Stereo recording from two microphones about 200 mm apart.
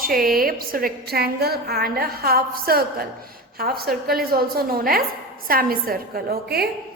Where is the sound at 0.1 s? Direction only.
45° right (ahead or behind).